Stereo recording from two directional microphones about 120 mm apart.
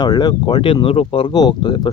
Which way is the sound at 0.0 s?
35° left (ahead or behind).